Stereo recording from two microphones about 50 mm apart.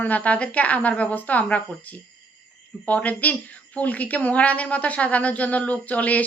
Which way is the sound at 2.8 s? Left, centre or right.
Left.